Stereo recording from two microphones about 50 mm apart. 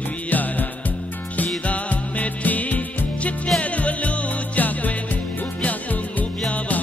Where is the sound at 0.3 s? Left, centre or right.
Left.